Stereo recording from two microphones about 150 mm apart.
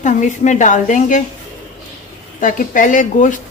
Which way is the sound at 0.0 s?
55° left (ahead or behind).